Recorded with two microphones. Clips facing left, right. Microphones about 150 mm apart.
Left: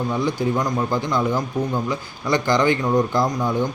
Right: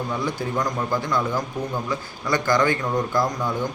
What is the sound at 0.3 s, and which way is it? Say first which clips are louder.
Speech: left 4 dB; 20° left (ahead or behind).